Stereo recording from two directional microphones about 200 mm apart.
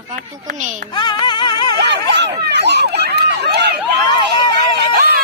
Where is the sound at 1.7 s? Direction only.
60° right (ahead or behind).